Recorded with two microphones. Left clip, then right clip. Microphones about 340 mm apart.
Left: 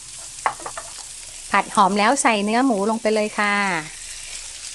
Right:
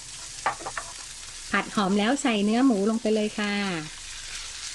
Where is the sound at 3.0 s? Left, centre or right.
Left.